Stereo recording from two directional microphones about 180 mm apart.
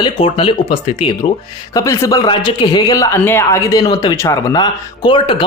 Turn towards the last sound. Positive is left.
turn(degrees=25)  # may be behind; listen again after turning